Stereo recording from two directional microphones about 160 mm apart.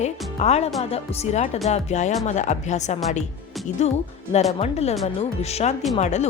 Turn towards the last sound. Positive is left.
turn(degrees=45)  # may be behind; listen again after turning